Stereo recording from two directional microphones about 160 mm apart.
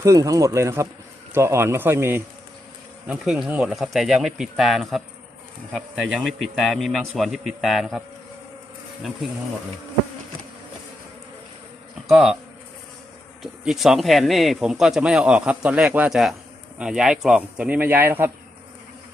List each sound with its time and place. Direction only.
0.0 s speech: 20° right (ahead or behind)
3.1 s speech: 5° right (ahead or behind)
12.0 s speech: 5° right (ahead or behind)
13.4 s speech: centre (ahead or behind)